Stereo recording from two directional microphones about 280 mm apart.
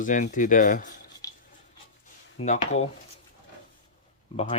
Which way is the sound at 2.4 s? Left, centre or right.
Left.